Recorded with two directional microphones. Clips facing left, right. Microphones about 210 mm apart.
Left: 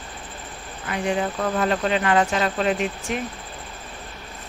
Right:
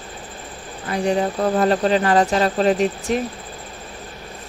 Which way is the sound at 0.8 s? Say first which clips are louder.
Right 4 dB; 35° right (ahead or behind).